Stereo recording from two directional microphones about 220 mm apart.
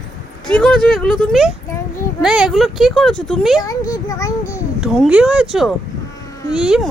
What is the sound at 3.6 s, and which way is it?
A child's voice, 15° left (ahead or behind).